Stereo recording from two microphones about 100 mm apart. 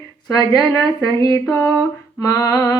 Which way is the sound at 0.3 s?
35° left (ahead or behind).